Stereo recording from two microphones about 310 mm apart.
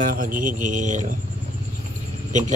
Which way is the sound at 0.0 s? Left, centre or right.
Right.